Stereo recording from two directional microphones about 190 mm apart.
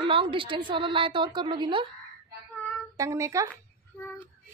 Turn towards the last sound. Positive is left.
turn(degrees=10)  # may be behind; listen again after turning